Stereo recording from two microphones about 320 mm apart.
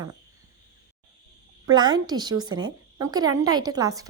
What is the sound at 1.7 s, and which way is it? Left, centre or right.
Speech, centre.